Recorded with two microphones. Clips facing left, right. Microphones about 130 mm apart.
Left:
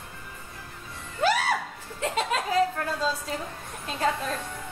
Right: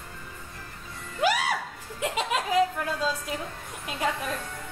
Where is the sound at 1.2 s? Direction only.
10° right (ahead or behind).